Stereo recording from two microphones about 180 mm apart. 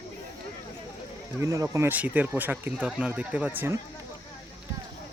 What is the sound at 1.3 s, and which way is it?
Speech, 15° right (ahead or behind).